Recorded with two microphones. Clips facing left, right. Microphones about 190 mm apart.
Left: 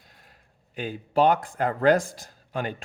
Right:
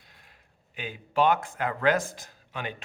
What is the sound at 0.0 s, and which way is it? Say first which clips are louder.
Speech: left 2 dB; 45° left (ahead or behind).